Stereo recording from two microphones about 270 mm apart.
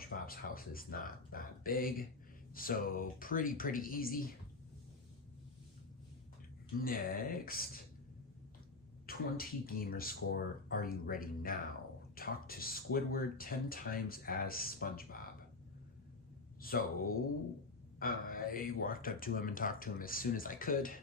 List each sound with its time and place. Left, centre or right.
0.0 s speech: left
6.8 s speech: left
9.0 s speech: left
16.6 s speech: left